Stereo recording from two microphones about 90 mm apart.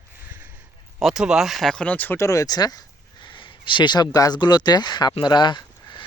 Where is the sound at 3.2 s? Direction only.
65° left (ahead or behind).